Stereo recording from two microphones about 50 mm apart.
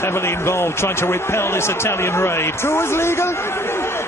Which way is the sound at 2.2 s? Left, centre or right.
Left.